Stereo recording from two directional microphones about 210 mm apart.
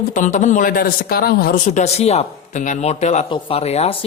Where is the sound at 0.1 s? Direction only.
35° left (ahead or behind).